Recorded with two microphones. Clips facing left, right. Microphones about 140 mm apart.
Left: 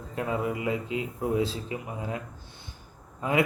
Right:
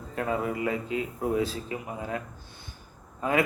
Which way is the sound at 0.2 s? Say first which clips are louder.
Right 1 dB; 20° left (ahead or behind).